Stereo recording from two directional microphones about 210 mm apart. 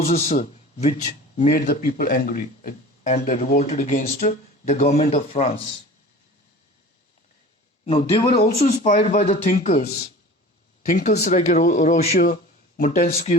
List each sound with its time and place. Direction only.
0.0 s a man's voice: 30° left (ahead or behind)
1.4 s speech: 45° left (ahead or behind); by 5.6 s 30° left (ahead or behind)
7.9 s speech: 25° left (ahead or behind)